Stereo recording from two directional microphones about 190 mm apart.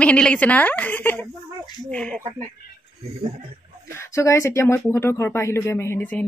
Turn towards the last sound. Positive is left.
turn(degrees=10)  # may be behind; listen again after turning